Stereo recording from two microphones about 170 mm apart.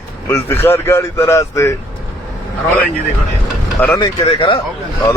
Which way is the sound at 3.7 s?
10° left (ahead or behind).